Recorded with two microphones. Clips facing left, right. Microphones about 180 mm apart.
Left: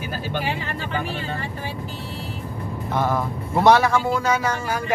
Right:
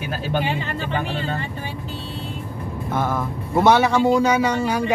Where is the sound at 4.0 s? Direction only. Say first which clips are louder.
Right 5 dB; 15° right (ahead or behind).